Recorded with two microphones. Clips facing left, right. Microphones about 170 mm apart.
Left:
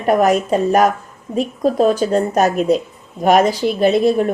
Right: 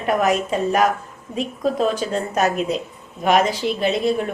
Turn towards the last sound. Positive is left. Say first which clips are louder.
# left 6 dB
turn(degrees=40)  # may be behind; listen again after turning